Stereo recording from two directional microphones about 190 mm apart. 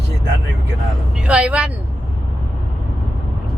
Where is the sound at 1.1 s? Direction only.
5° right (ahead or behind).